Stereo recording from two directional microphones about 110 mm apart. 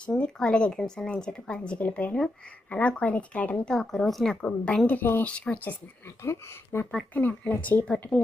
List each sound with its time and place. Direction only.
0.0 s a woman's voice: 10° left (ahead or behind)